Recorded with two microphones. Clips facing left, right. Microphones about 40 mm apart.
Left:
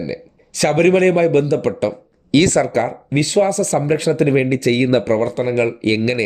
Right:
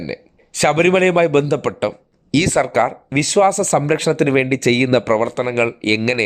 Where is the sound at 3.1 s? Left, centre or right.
Right.